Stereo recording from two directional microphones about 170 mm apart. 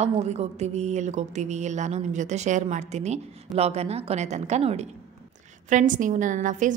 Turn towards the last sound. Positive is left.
turn(degrees=-50)  # may be behind; listen again after turning